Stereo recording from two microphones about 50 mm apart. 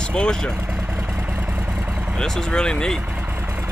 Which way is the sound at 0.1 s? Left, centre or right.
Centre.